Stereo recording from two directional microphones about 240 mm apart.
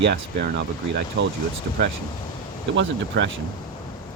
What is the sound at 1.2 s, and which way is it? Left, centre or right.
Speech, right.